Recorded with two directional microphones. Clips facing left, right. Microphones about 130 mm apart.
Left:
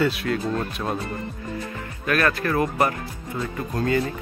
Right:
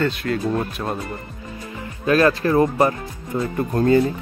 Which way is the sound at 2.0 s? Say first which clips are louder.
Right 6 dB; 25° right (ahead or behind).